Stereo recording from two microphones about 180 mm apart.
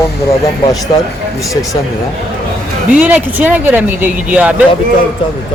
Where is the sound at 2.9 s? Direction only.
5° right (ahead or behind).